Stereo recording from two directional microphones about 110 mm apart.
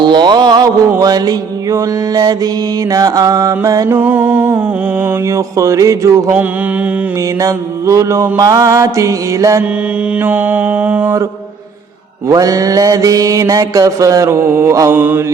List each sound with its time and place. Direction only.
0.0 s mantra: 45° right (ahead or behind)
3.8 s music: 20° right (ahead or behind)
5.3 s mantra: 30° right (ahead or behind)
7.4 s mantra: 30° right (ahead or behind)
10.2 s music: 15° right (ahead or behind)
12.3 s mantra: 30° right (ahead or behind)